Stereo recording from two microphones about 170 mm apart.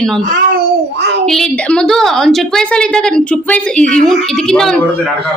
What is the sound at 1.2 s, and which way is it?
A woman's voice, 5° left (ahead or behind).